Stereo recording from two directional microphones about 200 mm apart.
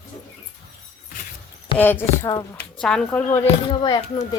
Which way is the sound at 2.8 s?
5° left (ahead or behind).